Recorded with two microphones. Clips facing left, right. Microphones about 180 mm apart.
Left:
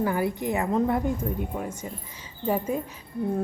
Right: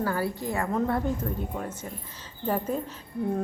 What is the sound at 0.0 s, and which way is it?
A woman's voice, 15° left (ahead or behind).